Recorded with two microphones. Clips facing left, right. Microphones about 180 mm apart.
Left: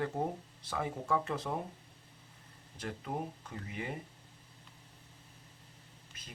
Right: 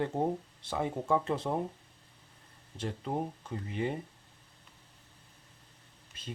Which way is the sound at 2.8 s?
25° right (ahead or behind).